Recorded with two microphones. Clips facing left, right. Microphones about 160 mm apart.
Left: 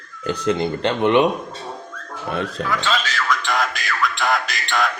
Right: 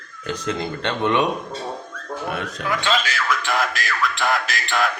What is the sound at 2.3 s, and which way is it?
Speech, 30° left (ahead or behind).